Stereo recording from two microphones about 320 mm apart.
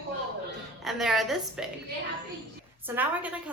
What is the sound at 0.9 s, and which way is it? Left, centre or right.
Speech, centre.